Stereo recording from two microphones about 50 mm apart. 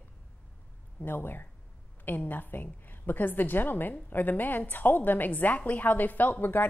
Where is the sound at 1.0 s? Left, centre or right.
Left.